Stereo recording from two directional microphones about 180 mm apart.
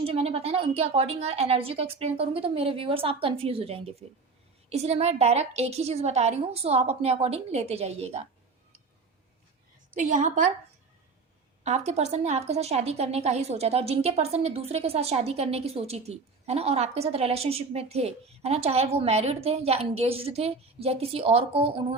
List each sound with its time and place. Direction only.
0.0 s a woman's voice: 35° right (ahead or behind)
10.0 s a woman's voice: 45° right (ahead or behind)
11.6 s a woman's voice: 40° right (ahead or behind)